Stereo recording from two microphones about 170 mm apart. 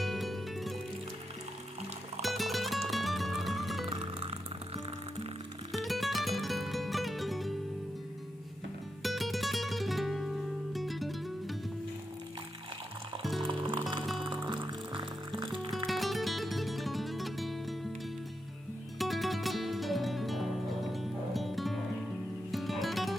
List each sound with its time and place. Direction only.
0.0 s music: centre (ahead or behind)
2.2 s music: centre (ahead or behind)
3.8 s music: 35° right (ahead or behind)
5.7 s music: centre (ahead or behind)
9.0 s music: centre (ahead or behind)
13.4 s music: 30° right (ahead or behind)
15.9 s music: centre (ahead or behind)
18.9 s music: centre (ahead or behind)